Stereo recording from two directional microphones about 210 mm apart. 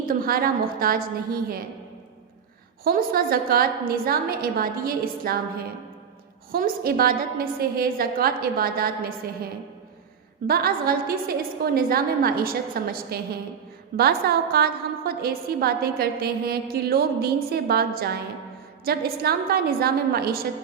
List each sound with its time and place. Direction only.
0.0 s a woman's voice: 45° right (ahead or behind)
2.8 s a woman's voice: 45° right (ahead or behind)
6.5 s a woman's voice: 45° right (ahead or behind)
10.4 s a woman's voice: 45° right (ahead or behind)